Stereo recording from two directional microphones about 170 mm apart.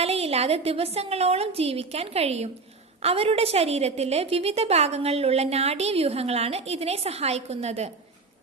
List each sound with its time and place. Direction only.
0.0 s a woman's voice: 35° right (ahead or behind)